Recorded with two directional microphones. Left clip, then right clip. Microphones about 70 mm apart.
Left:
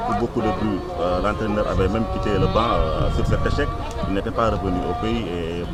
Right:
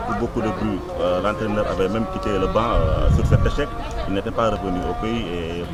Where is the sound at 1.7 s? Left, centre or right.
Right.